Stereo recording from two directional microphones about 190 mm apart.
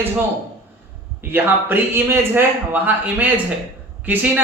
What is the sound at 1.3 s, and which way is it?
A man's voice, 10° right (ahead or behind).